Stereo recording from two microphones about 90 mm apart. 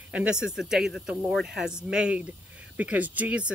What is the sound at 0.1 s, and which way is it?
Speech, 10° right (ahead or behind).